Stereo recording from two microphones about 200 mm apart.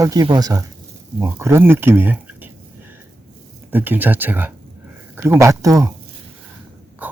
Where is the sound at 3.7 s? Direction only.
10° right (ahead or behind).